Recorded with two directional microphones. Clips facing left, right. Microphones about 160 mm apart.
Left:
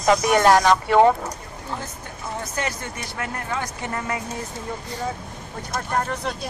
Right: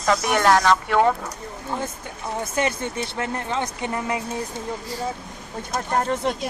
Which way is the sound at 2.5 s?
20° right (ahead or behind).